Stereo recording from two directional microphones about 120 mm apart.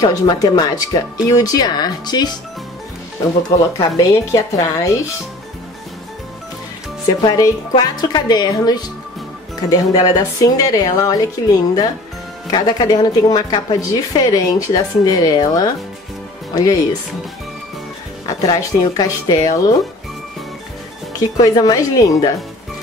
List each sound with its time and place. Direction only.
0.0 s a woman's voice: 30° left (ahead or behind)
3.7 s speech: 30° left (ahead or behind)
7.2 s a woman's voice: 30° left (ahead or behind)
18.2 s speech: 30° left (ahead or behind)
21.2 s a woman's voice: 30° left (ahead or behind)